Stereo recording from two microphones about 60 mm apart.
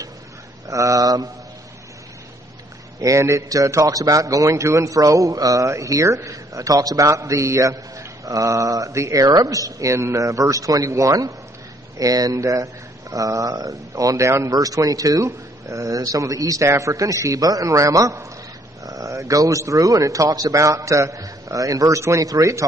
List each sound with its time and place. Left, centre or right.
0.7 s speech: right
3.0 s a man's voice: right
5.7 s a man's voice: right
12.0 s a man's voice: right
15.2 s a man's voice: right
16.6 s a man's voice: right